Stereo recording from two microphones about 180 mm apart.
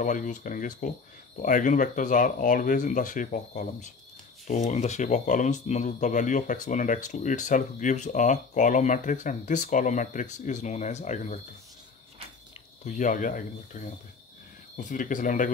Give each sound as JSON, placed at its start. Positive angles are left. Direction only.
{"t": 0.0, "sound": "speech", "side_deg": 45}
{"t": 12.8, "sound": "speech", "side_deg": 45}